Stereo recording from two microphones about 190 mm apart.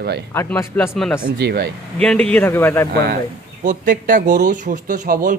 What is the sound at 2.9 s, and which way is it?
Speech, 55° right (ahead or behind).